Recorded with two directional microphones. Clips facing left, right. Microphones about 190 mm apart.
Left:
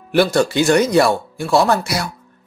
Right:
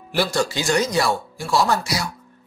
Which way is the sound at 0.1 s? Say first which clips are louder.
Left 7 dB; 60° left (ahead or behind).